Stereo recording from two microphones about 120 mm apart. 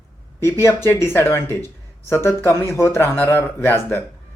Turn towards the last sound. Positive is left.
turn(degrees=20)  # may be behind; listen again after turning